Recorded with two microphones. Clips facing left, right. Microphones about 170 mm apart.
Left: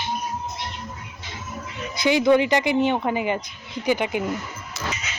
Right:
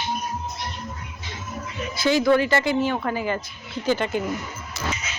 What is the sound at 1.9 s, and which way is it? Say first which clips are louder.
A woman's voice: left 1 dB; 20° left (ahead or behind).